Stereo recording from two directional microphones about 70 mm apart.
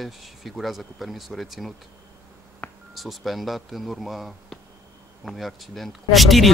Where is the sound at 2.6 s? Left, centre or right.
Centre.